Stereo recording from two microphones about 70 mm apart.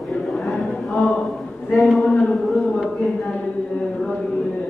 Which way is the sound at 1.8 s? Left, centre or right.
Centre.